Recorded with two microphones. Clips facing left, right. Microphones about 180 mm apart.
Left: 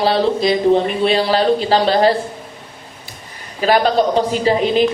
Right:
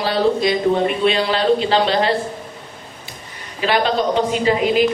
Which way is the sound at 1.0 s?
35° left (ahead or behind).